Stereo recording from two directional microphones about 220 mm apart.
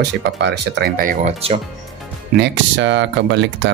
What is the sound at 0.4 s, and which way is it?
Speech, 50° right (ahead or behind).